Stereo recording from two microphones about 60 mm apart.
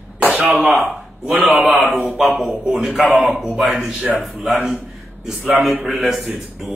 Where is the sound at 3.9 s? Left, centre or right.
Right.